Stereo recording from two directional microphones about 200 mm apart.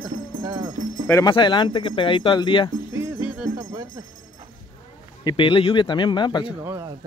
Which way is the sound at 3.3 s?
5° right (ahead or behind).